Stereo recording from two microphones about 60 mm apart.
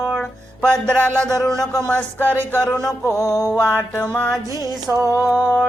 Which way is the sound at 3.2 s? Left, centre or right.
Left.